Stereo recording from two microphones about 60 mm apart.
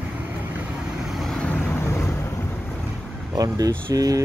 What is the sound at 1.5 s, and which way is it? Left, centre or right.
Vehicle, left.